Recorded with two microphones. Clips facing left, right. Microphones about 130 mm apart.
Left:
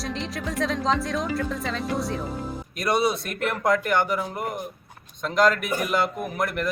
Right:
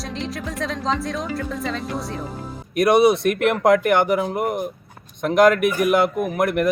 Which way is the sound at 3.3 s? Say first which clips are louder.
Right 7 dB; 65° right (ahead or behind).